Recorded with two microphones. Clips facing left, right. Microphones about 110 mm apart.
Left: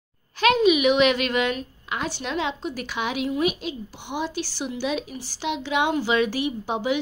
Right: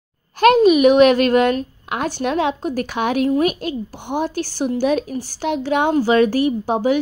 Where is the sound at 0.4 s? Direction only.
45° right (ahead or behind).